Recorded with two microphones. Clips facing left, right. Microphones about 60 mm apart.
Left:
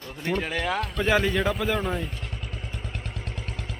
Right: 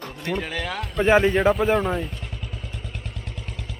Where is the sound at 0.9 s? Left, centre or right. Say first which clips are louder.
Right 7 dB; right.